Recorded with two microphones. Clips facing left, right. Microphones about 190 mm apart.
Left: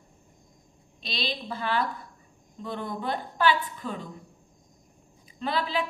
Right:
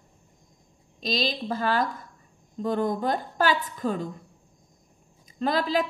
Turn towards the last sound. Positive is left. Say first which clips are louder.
# right 4 dB
turn(degrees=-40)  # may be behind; listen again after turning